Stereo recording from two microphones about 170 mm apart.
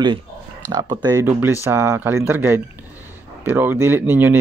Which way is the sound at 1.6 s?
15° right (ahead or behind).